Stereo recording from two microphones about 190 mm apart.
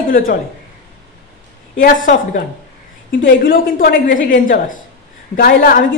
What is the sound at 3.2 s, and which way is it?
A woman's voice, 50° left (ahead or behind).